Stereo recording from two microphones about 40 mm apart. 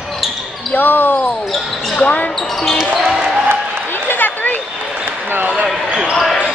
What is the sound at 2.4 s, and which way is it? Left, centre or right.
Basketball bounce, centre.